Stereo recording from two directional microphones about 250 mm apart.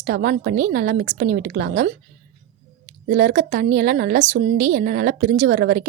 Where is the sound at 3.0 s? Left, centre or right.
Right.